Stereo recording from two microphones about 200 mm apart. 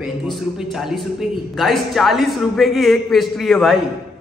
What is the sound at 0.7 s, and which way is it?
Speech, centre (ahead or behind).